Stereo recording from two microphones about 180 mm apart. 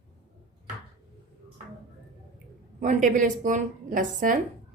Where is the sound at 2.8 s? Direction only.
45° right (ahead or behind).